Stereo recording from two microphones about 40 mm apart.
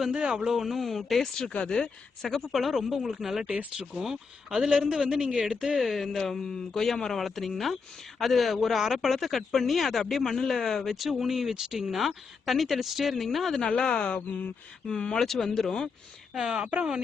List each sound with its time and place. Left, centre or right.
0.1 s speech: centre
1.4 s speech: left
2.3 s a man's voice: centre
5.8 s speech: centre
13.6 s speech: centre
14.1 s speech: left
14.8 s speech: centre
16.3 s speech: centre